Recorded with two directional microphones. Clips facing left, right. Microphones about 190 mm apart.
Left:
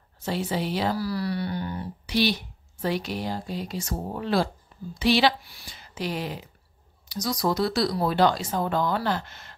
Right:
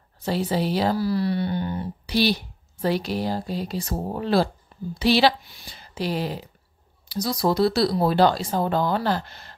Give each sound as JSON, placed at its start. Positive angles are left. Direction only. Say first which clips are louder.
{"t": 0.2, "sound": "speech", "louder": "right 4 dB", "side_deg": -35}
{"t": 0.9, "sound": "speech", "louder": "right 5 dB", "side_deg": -25}